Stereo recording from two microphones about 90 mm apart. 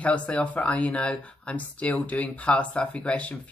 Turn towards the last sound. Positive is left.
turn(degrees=10)  # may be behind; listen again after turning